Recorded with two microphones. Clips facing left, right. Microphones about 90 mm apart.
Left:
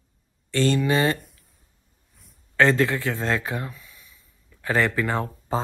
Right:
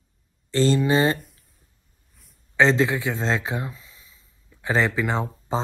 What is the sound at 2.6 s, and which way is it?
A man's voice, 20° right (ahead or behind).